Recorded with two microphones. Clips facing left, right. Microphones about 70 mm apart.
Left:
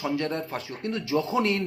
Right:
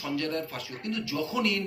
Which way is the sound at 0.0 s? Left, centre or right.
Left.